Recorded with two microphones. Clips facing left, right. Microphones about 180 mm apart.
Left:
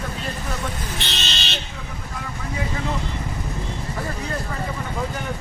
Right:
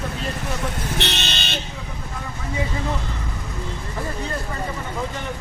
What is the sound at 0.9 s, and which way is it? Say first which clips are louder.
Vehicle: right 4 dB; 65° right (ahead or behind).